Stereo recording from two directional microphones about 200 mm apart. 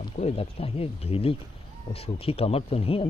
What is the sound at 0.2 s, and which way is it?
Speech, 30° left (ahead or behind).